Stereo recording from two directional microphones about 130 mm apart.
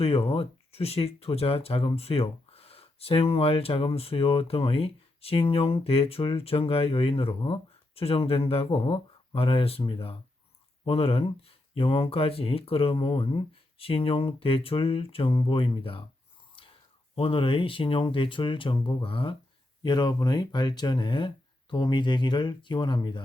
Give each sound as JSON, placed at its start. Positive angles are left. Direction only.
{"t": 0.0, "sound": "speech", "side_deg": 50}
{"t": 16.6, "sound": "whispering", "side_deg": 45}
{"t": 17.2, "sound": "speech", "side_deg": 45}